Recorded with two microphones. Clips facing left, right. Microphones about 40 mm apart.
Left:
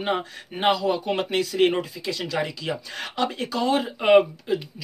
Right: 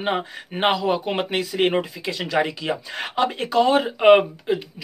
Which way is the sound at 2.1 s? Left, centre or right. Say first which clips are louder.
Right 5 dB; right.